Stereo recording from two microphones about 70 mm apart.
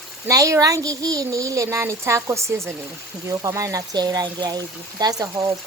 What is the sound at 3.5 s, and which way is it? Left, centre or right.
Speech, right.